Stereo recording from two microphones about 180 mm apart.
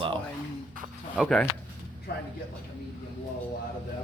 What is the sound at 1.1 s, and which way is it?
Speech, 5° left (ahead or behind).